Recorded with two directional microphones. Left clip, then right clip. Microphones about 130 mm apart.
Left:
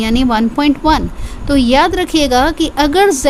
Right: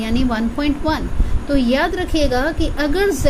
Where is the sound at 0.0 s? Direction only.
45° left (ahead or behind).